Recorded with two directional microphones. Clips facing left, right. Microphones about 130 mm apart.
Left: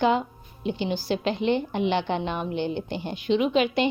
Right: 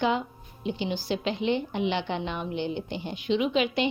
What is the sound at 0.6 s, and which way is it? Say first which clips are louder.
A woman's voice: left 3 dB; 50° left (ahead or behind).